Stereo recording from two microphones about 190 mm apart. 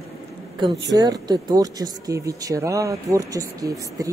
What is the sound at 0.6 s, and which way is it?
Speech, 20° right (ahead or behind).